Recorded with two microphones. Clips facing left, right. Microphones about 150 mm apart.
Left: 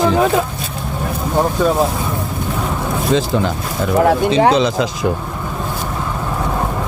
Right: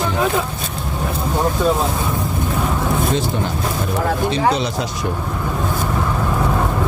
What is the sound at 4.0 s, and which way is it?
Speech, 80° left.